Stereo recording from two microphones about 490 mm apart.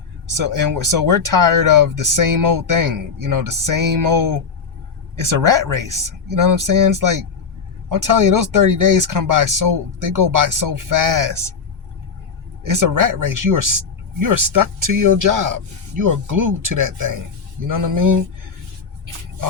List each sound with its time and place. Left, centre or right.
0.4 s speech: right
5.3 s speech: right
12.6 s speech: right
17.7 s speech: right